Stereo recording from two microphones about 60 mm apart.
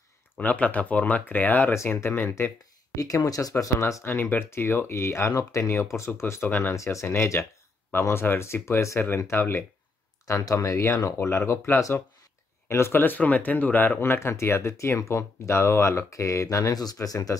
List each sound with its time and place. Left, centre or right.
0.4 s speech: left
3.3 s speech: left
4.0 s speech: left
10.2 s speech: left
11.1 s speech: left
13.0 s speech: left
14.3 s speech: left